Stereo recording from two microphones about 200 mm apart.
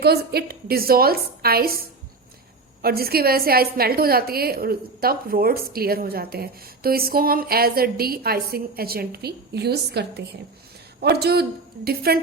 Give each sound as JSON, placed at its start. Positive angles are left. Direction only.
{"t": 0.0, "sound": "a woman's voice", "side_deg": -55}
{"t": 2.8, "sound": "a woman's voice", "side_deg": -50}